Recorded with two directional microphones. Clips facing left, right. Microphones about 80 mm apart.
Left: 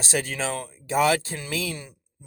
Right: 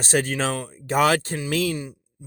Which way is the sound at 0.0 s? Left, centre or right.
Right.